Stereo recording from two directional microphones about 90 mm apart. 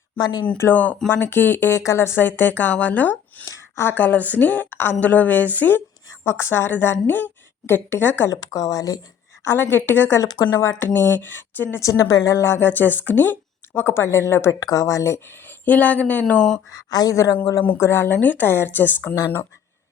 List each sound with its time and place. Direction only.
0.2 s speech: 50° left (ahead or behind)
0.6 s speech: 20° left (ahead or behind)
3.4 s a sound: 35° left (ahead or behind)
3.8 s speech: 20° left (ahead or behind)
8.3 s speech: 45° left (ahead or behind)
9.4 s speech: 25° left (ahead or behind)
10.2 s speech: 40° left (ahead or behind)
10.8 s speech: 25° left (ahead or behind)
11.8 s speech: 40° left (ahead or behind)
14.6 s speech: 40° left (ahead or behind); by 16.6 s 10° left (ahead or behind)
16.7 s speech: 45° left (ahead or behind)
17.7 s speech: 25° left (ahead or behind)